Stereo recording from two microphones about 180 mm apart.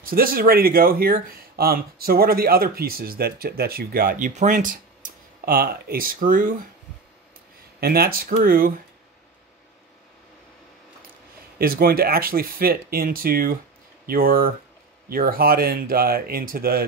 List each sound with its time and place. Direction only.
0.0 s speech: 55° right (ahead or behind)
7.8 s speech: 55° right (ahead or behind)
11.5 s speech: 55° right (ahead or behind)